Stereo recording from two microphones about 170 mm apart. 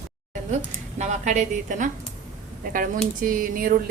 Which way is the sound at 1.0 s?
45° right (ahead or behind).